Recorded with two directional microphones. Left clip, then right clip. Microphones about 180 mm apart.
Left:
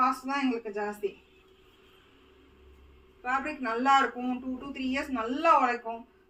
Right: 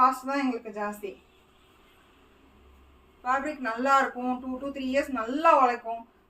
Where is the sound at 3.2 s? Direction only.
15° right (ahead or behind).